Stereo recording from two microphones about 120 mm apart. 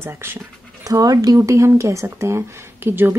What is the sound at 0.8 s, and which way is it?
Speech, 30° right (ahead or behind).